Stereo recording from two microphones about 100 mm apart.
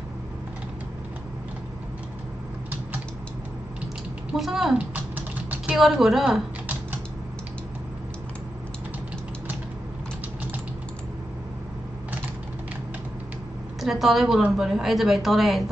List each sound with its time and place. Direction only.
4.3 s a woman's voice: 5° right (ahead or behind)
4.7 s typing: 15° right (ahead or behind)
5.8 s a woman's voice: 5° right (ahead or behind)
13.7 s a woman's voice: centre (ahead or behind)